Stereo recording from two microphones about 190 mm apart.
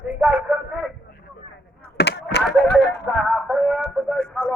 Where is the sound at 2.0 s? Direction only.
60° left (ahead or behind).